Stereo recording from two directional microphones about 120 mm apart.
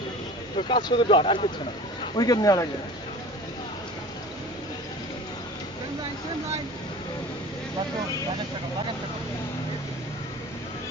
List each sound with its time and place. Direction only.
0.6 s speech: 40° left (ahead or behind)
2.1 s speech: 30° left (ahead or behind)